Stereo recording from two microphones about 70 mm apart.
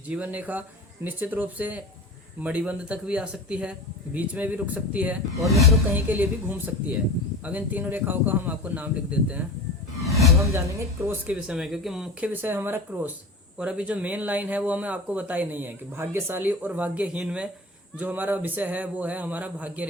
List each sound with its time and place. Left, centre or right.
0.1 s speech: right
5.4 s speech: centre
5.9 s speech: right
10.0 s music: centre
11.3 s speech: centre
12.3 s speech: right
13.6 s speech: centre; by 16.4 s right
16.4 s speech: right